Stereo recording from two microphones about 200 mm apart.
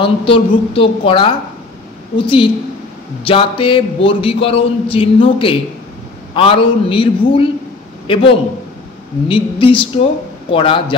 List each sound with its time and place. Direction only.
0.0 s a man's voice: 25° left (ahead or behind)